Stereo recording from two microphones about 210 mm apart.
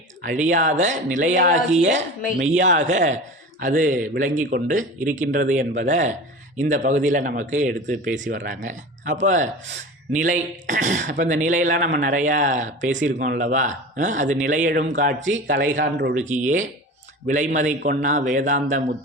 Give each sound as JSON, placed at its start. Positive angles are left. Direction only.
{"t": 0.4, "sound": "speech", "side_deg": -35}
{"t": 2.4, "sound": "speech", "side_deg": -35}
{"t": 15.5, "sound": "a man's voice", "side_deg": -60}
{"t": 16.2, "sound": "speech", "side_deg": -35}